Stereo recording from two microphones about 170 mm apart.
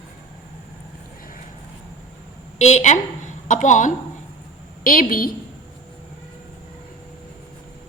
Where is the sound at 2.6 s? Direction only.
40° left (ahead or behind).